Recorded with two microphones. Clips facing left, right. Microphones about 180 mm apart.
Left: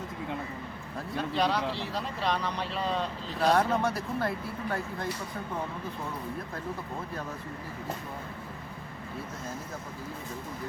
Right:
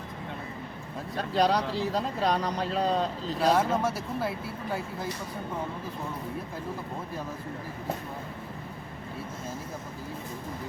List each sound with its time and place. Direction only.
1.1 s speech: 40° right (ahead or behind)
3.4 s speech: centre (ahead or behind)